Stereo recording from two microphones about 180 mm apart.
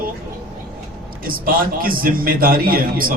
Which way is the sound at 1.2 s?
50° right (ahead or behind).